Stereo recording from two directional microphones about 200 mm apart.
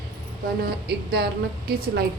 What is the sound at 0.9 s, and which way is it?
A woman's voice, 55° right (ahead or behind).